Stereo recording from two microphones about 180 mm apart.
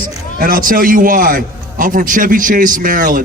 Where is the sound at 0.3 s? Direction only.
50° right (ahead or behind).